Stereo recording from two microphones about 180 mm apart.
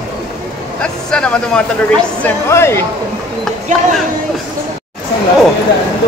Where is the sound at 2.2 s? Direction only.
15° left (ahead or behind).